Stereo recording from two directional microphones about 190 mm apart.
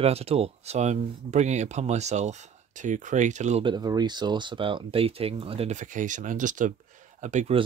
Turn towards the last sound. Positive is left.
turn(degrees=-35)  # may be behind; listen again after turning